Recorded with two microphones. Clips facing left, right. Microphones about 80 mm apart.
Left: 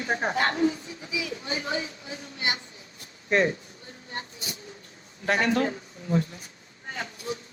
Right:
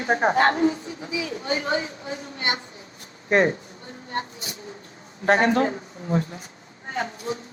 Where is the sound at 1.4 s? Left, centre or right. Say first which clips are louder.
Right 6 dB; right.